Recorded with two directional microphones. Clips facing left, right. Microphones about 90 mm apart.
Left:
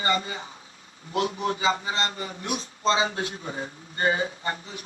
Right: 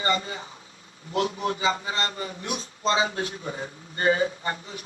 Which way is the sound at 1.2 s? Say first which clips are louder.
Even; 30° left (ahead or behind).